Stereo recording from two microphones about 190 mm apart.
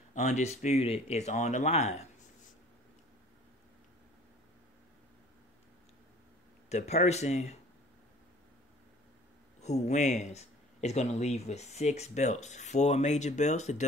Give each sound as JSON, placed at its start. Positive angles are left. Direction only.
{"t": 0.1, "sound": "speech", "side_deg": 40}
{"t": 6.7, "sound": "speech", "side_deg": 35}
{"t": 9.6, "sound": "speech", "side_deg": 35}